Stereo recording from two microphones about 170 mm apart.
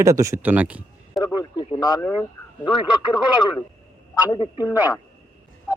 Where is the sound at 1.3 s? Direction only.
25° left (ahead or behind).